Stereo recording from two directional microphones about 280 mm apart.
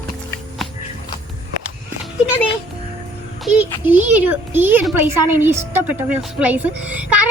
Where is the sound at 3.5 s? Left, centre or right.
Centre.